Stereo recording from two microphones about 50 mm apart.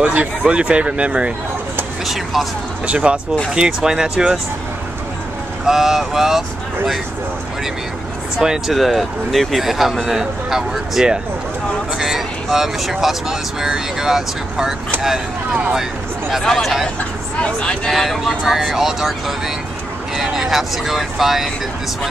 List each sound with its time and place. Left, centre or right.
0.0 s speech: right
2.9 s speech: right
5.7 s speech: centre
8.4 s speech: centre
15.7 s speech: centre
16.4 s speech: centre
17.4 s speech: centre
17.9 s speech: centre